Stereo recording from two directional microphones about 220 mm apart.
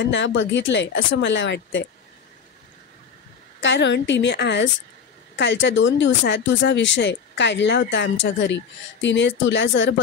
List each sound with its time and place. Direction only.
0.0 s speech: 55° left (ahead or behind)
3.6 s a woman's voice: 55° left (ahead or behind)